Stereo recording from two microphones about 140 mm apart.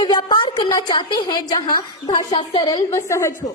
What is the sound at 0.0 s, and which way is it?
A woman's voice, 30° left (ahead or behind).